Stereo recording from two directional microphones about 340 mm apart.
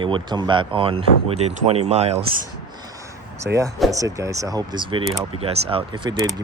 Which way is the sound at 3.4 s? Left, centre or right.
Centre.